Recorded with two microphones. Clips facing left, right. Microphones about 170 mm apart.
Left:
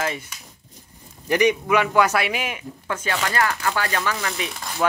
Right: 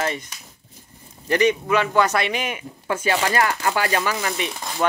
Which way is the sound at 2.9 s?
10° right (ahead or behind).